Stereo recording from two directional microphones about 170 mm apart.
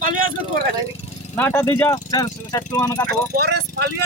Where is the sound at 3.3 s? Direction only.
70° right (ahead or behind).